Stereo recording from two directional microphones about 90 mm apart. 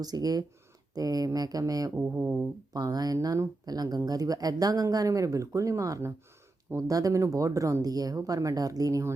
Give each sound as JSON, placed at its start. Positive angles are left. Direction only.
{"t": 0.0, "sound": "speech", "side_deg": -45}
{"t": 2.0, "sound": "music", "side_deg": -20}
{"t": 2.7, "sound": "speech", "side_deg": -45}